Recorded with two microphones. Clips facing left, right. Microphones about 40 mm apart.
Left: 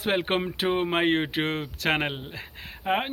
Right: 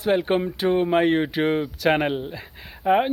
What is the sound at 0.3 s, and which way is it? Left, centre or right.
Speech, left.